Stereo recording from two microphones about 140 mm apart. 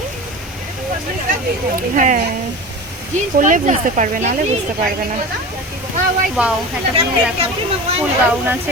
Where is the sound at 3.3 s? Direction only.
70° right (ahead or behind).